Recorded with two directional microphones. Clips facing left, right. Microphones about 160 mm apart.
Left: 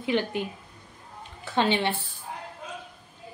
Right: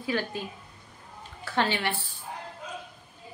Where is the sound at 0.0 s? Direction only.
20° left (ahead or behind).